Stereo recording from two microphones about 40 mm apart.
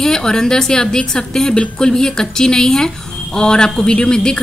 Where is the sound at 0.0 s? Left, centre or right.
Centre.